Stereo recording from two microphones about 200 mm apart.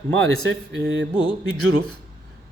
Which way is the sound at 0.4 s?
65° right (ahead or behind).